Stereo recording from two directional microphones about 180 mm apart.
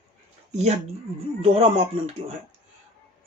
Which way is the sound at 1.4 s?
35° right (ahead or behind).